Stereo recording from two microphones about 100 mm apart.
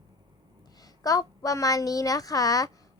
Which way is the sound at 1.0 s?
35° left (ahead or behind).